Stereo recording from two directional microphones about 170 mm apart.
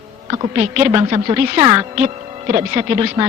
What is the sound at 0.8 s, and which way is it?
A man's voice, 25° right (ahead or behind).